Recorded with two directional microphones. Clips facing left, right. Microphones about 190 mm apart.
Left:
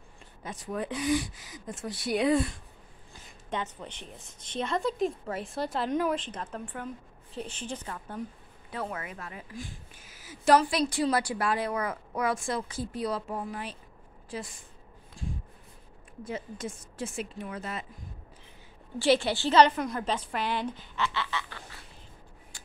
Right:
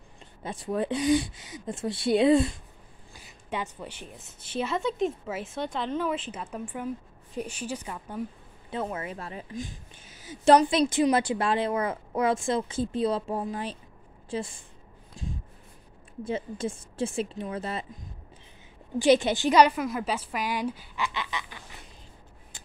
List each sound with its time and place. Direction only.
0.4 s a woman's voice: 30° right (ahead or behind)
3.2 s a woman's voice: 10° right (ahead or behind); by 6.1 s 10° left (ahead or behind)
6.1 s a woman's voice: 5° right (ahead or behind)
8.6 s a woman's voice: 25° right (ahead or behind)
15.2 s a sound: 20° right (ahead or behind)
16.3 s a woman's voice: 30° right (ahead or behind)
18.9 s a woman's voice: 20° right (ahead or behind)